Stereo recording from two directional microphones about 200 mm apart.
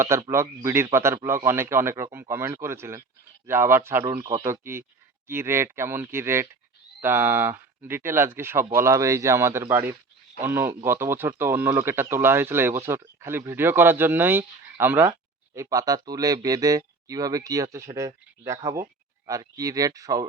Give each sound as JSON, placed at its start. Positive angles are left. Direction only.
{"t": 0.0, "sound": "speech", "side_deg": -15}